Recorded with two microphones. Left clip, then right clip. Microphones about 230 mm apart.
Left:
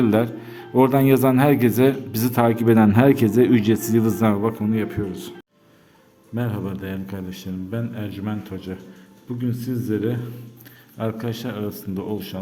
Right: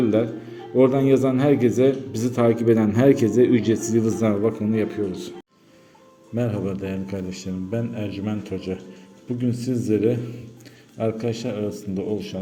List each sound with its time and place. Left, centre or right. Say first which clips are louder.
0.0 s speech: left 1 dB; left; by 5.3 s centre
6.3 s a man's voice: right 3 dB; centre